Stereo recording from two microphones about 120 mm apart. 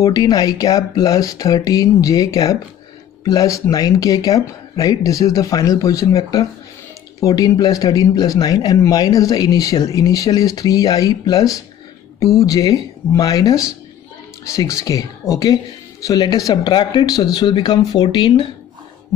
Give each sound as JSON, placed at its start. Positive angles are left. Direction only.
{"t": 0.0, "sound": "speech", "side_deg": 30}